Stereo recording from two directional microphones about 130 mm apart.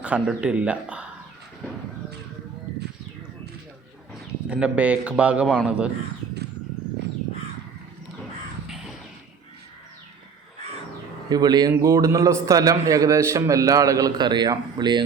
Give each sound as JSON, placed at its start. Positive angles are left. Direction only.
{"t": 0.0, "sound": "speech", "side_deg": -10}
{"t": 4.1, "sound": "a man's voice", "side_deg": -10}
{"t": 8.6, "sound": "crow", "side_deg": 0}
{"t": 11.3, "sound": "a man's voice", "side_deg": -30}